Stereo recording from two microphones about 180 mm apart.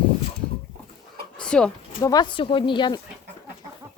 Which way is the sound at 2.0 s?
20° left (ahead or behind).